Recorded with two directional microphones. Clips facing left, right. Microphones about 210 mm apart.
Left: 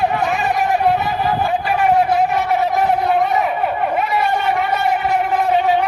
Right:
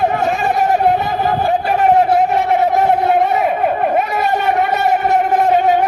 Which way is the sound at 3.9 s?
45° right (ahead or behind).